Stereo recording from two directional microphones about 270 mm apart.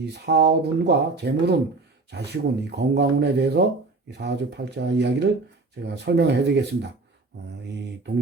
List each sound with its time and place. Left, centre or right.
0.0 s speech: right